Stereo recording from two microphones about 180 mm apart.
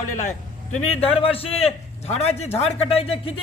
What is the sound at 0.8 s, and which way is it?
A man's voice, 30° left (ahead or behind).